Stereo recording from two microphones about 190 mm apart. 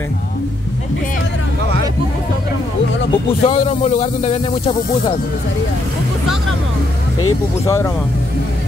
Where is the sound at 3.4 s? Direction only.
35° left (ahead or behind).